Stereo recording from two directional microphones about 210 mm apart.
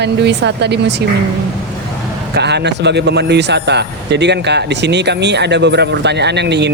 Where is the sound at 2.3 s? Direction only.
55° right (ahead or behind).